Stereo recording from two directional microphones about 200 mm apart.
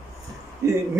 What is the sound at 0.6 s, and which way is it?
Speech, 15° right (ahead or behind).